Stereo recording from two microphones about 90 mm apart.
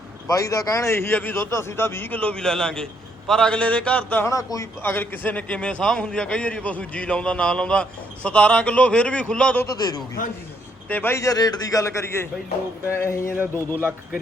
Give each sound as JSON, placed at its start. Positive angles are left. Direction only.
{"t": 0.3, "sound": "a man's voice", "side_deg": 40}
{"t": 4.2, "sound": "a man's voice", "side_deg": 35}
{"t": 4.8, "sound": "a man's voice", "side_deg": 20}
{"t": 9.6, "sound": "a man's voice", "side_deg": 50}
{"t": 10.8, "sound": "a man's voice", "side_deg": 20}
{"t": 11.2, "sound": "a man's voice", "side_deg": 45}
{"t": 13.3, "sound": "a man's voice", "side_deg": -15}